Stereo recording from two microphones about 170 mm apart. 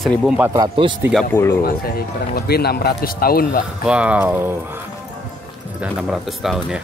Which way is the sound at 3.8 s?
5° right (ahead or behind).